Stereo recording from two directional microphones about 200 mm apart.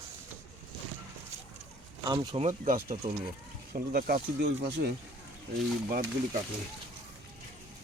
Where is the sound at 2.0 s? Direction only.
25° right (ahead or behind).